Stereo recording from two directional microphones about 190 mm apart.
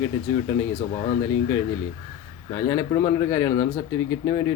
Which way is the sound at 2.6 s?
15° left (ahead or behind).